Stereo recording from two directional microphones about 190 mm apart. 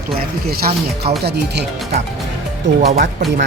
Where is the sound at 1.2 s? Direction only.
60° right (ahead or behind).